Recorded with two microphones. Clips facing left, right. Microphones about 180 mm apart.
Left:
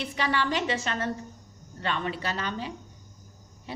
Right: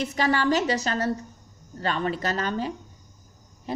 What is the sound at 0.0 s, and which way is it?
A woman's voice, 40° right (ahead or behind).